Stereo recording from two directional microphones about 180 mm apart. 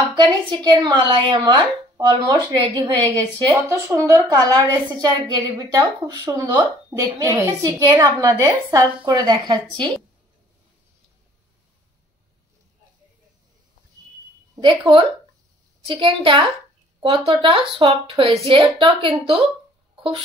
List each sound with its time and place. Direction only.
0.1 s a woman's voice: 25° right (ahead or behind)
14.5 s a sound: 25° right (ahead or behind)
15.9 s a woman's voice: 30° right (ahead or behind)